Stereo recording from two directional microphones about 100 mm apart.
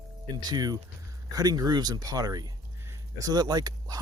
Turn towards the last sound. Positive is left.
turn(degrees=-40)  # may be behind; listen again after turning